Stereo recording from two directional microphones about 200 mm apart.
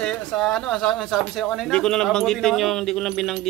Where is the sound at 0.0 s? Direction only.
5° left (ahead or behind).